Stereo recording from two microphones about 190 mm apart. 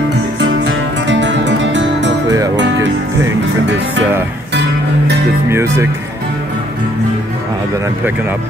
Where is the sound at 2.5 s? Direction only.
70° right (ahead or behind).